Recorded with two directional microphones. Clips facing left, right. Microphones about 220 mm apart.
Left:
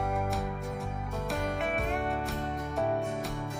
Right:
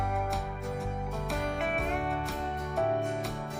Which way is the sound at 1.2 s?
Centre (ahead or behind).